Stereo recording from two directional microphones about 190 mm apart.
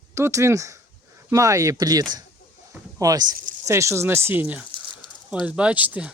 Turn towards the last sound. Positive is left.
turn(degrees=-10)  # may be behind; listen again after turning